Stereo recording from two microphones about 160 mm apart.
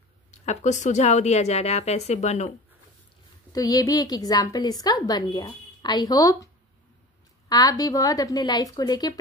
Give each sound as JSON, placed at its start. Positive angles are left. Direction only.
{"t": 0.3, "sound": "a woman's voice", "side_deg": 45}
{"t": 3.5, "sound": "a woman's voice", "side_deg": 25}